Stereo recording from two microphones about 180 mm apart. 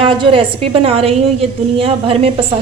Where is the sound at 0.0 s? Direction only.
30° right (ahead or behind).